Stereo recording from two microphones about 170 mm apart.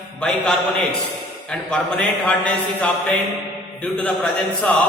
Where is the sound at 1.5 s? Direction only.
5° left (ahead or behind).